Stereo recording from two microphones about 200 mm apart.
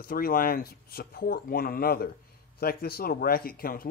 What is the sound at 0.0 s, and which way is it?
Speech, 45° left (ahead or behind).